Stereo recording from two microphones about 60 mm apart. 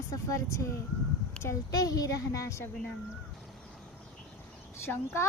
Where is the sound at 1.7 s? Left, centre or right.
Left.